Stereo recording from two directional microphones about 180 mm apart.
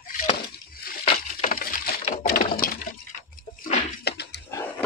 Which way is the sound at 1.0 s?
35° left (ahead or behind).